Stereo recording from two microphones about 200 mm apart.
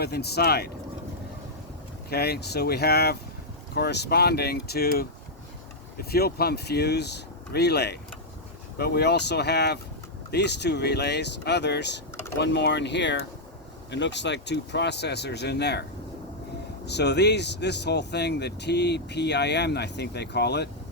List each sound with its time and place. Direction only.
0.0 s speech: 55° left (ahead or behind)
2.0 s speech: 50° left (ahead or behind)